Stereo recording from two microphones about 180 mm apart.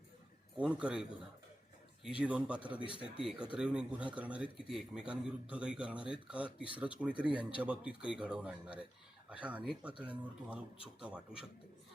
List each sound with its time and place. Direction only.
0.5 s speech: 5° right (ahead or behind)
2.0 s speech: 5° right (ahead or behind)
2.8 s speech: 30° left (ahead or behind)
3.2 s speech: 5° right (ahead or behind)